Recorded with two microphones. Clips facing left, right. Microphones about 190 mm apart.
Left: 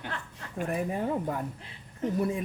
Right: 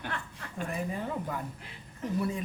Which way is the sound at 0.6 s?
50° left (ahead or behind).